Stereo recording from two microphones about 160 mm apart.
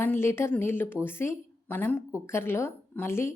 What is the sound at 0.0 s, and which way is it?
A woman's voice, 15° left (ahead or behind).